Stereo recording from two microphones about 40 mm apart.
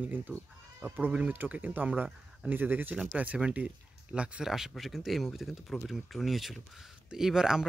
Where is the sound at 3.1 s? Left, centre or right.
Right.